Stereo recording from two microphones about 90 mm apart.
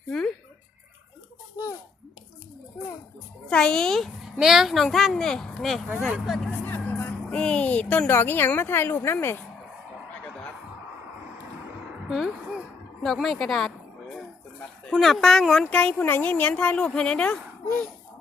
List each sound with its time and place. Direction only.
3.5 s a woman's voice: 10° left (ahead or behind)
6.7 s speech: 20° left (ahead or behind)
12.0 s a sound: 5° right (ahead or behind)
14.8 s speech: 5° left (ahead or behind)